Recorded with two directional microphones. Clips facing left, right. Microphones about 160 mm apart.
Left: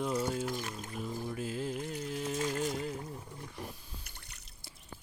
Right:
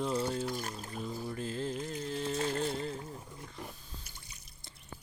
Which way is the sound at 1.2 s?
10° left (ahead or behind).